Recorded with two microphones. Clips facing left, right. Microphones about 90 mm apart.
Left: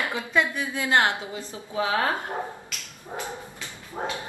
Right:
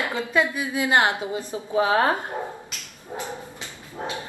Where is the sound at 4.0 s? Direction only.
55° left (ahead or behind).